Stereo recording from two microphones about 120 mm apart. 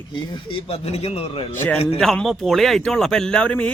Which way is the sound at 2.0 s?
5° left (ahead or behind).